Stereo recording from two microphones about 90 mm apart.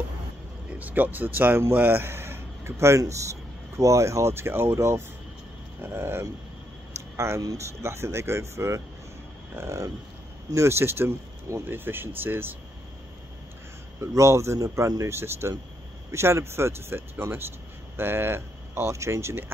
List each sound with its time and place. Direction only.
0.7 s speech: 20° right (ahead or behind)
14.0 s speech: 35° right (ahead or behind)